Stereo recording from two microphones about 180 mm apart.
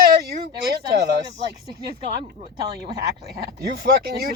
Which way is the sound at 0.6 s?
65° right (ahead or behind).